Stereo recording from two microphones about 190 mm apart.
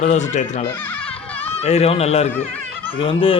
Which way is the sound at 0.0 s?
40° left (ahead or behind).